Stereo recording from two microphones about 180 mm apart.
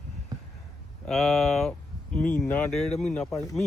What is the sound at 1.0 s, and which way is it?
Speech, centre (ahead or behind).